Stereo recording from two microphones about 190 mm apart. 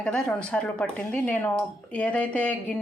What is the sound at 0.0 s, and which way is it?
Speech, 5° left (ahead or behind).